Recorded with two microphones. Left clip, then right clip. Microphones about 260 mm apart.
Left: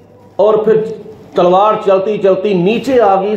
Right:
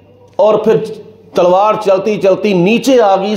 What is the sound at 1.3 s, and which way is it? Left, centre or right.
A man's voice, right.